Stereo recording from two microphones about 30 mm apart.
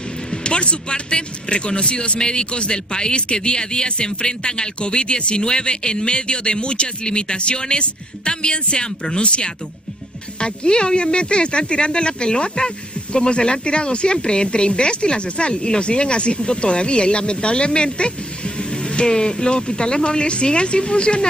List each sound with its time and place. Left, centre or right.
0.3 s speech: left